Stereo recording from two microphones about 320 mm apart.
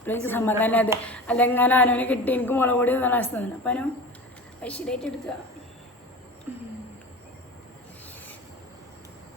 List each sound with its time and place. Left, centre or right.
0.0 s a woman's voice: centre